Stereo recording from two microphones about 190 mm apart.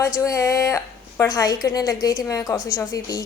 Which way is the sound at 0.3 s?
15° left (ahead or behind).